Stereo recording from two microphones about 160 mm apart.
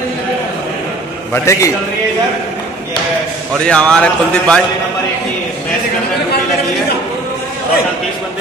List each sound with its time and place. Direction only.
1.3 s a man's voice: 20° left (ahead or behind)
3.6 s a man's voice: 5° left (ahead or behind)